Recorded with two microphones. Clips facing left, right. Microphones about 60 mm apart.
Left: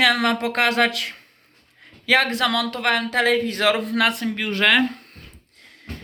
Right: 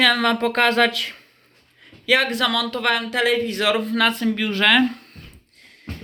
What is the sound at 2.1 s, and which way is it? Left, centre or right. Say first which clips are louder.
Speech: even; left.